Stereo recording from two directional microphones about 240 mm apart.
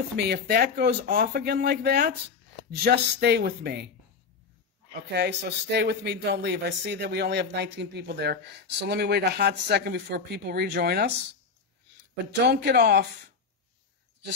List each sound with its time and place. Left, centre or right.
0.2 s speech: right
5.1 s speech: right
12.4 s speech: right